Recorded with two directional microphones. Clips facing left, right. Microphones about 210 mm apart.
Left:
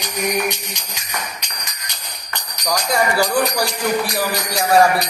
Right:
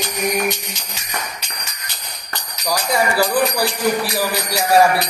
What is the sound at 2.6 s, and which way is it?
Music, centre (ahead or behind).